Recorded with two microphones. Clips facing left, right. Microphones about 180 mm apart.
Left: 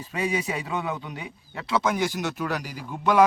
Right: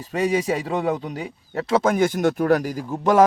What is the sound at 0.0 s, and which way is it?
Speech, 40° right (ahead or behind).